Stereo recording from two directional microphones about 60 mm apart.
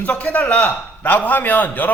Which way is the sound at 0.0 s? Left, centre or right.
Left.